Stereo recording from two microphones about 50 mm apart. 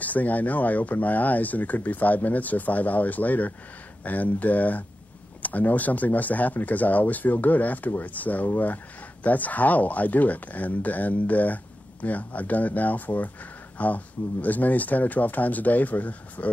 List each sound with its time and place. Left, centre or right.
0.0 s speech: left